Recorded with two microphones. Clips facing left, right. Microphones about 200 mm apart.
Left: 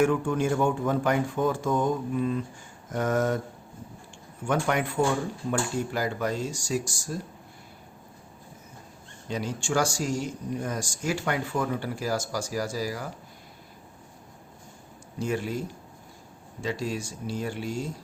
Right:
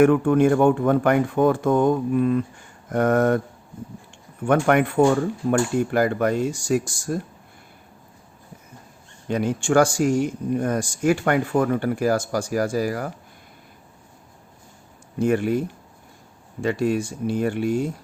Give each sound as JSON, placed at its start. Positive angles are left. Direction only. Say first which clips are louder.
{"t": 0.0, "sound": "speech", "louder": "right 8 dB", "side_deg": -60}
{"t": 4.4, "sound": "speech", "louder": "right 8 dB", "side_deg": -60}
{"t": 9.3, "sound": "speech", "louder": "right 9 dB", "side_deg": -55}
{"t": 15.2, "sound": "speech", "louder": "right 9 dB", "side_deg": -60}